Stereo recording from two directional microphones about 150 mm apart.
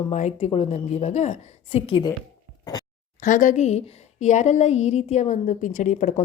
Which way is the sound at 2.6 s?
25° left (ahead or behind).